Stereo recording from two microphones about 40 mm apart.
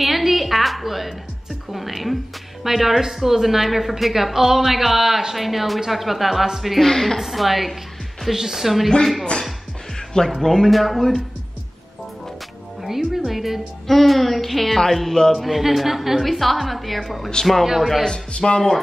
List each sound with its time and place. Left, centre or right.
0.0 s a sound: centre
1.7 s speech: centre
6.9 s speech: centre
7.2 s speech: centre
10.2 s speech: centre
12.8 s a woman's voice: centre
18.0 s speech: centre